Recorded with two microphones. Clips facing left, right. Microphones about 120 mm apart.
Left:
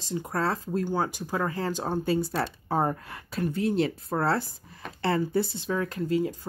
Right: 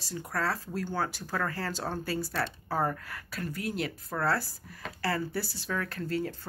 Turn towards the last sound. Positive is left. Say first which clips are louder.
# left 6 dB
turn(degrees=15)  # may be behind; listen again after turning